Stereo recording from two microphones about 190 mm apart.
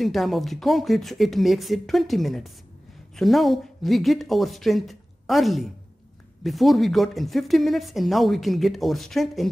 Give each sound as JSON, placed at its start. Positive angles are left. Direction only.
{"t": 0.0, "sound": "speech", "side_deg": 0}